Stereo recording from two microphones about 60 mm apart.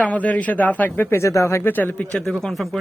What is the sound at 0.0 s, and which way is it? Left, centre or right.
Speech, left.